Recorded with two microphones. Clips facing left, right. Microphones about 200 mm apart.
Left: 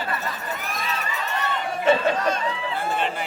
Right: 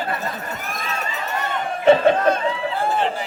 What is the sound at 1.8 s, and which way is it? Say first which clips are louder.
Speech: right 6 dB; 55° right (ahead or behind).